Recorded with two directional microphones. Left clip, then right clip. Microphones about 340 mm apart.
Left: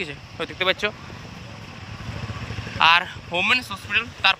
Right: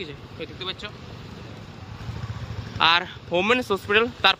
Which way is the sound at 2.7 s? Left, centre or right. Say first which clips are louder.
Left 3 dB; centre.